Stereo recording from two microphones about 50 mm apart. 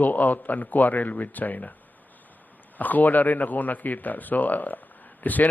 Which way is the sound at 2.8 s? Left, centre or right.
Left.